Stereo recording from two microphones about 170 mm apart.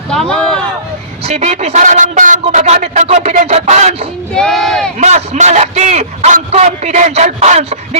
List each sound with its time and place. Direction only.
0.1 s speech: 5° left (ahead or behind)
1.2 s speech: 40° right (ahead or behind)
4.4 s speech: centre (ahead or behind)
4.9 s a man's voice: 40° right (ahead or behind)